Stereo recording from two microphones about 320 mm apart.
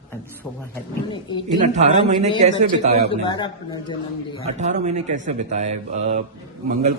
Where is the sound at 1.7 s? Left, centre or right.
Right.